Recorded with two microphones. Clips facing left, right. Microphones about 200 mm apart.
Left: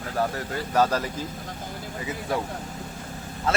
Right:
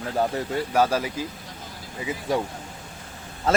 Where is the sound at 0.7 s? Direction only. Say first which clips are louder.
Even; 10° right (ahead or behind).